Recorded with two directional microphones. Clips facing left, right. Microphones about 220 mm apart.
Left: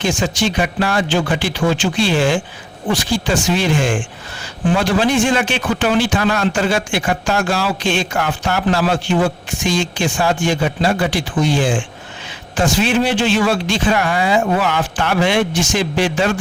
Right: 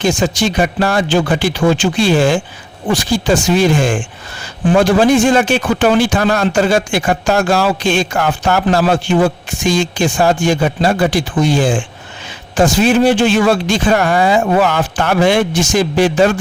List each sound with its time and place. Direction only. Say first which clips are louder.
0.0 s speech: right 4 dB; 40° right (ahead or behind)